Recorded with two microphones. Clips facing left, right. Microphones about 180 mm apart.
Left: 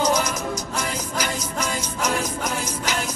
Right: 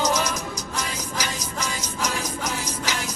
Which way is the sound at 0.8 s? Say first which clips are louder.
Left 1 dB; 55° left (ahead or behind).